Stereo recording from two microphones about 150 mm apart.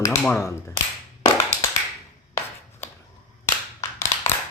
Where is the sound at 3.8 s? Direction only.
20° left (ahead or behind).